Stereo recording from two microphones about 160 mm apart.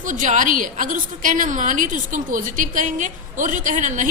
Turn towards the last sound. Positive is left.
turn(degrees=-50)  # may be behind; listen again after turning